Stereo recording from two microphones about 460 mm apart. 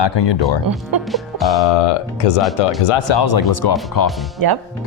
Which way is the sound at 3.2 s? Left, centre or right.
Left.